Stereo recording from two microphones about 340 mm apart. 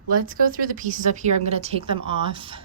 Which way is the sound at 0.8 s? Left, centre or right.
Right.